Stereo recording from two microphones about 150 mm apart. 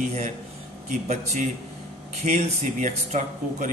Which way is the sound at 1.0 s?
50° right (ahead or behind).